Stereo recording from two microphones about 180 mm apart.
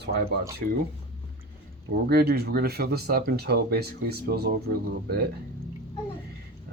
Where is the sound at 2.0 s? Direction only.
60° right (ahead or behind).